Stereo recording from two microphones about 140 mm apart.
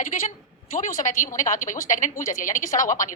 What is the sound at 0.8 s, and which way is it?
A woman's voice, 75° left (ahead or behind).